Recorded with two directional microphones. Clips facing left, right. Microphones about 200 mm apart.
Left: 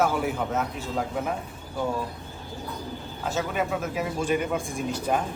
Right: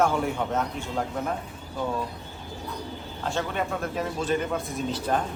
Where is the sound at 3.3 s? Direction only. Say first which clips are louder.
Left 1 dB; 5° left (ahead or behind).